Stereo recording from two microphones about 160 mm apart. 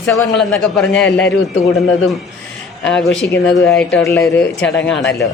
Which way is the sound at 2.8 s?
5° left (ahead or behind).